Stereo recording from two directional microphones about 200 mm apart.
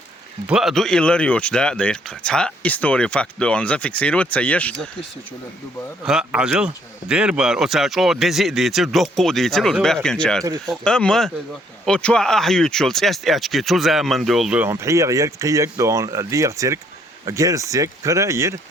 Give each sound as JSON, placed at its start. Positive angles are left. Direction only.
{"t": 0.4, "sound": "speech", "side_deg": 0}
{"t": 6.0, "sound": "speech", "side_deg": -5}